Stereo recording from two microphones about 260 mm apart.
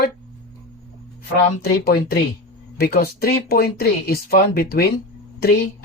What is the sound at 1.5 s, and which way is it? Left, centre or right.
Speech, left.